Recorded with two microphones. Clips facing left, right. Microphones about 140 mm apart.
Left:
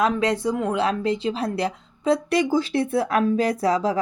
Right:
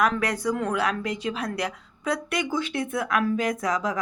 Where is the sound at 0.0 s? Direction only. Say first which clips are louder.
Left 3 dB; 25° left (ahead or behind).